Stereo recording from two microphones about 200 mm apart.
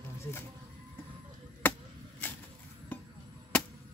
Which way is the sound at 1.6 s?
10° left (ahead or behind).